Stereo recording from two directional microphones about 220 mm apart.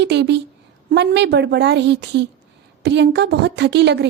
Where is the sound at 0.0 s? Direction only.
50° right (ahead or behind).